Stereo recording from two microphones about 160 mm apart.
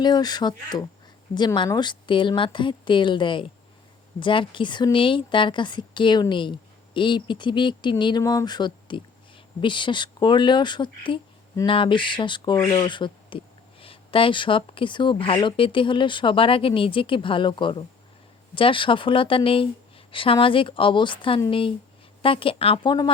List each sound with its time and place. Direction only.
0.0 s speech: 25° left (ahead or behind)